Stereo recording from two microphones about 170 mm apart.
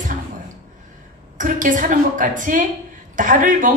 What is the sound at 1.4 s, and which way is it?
A woman's voice, 50° right (ahead or behind).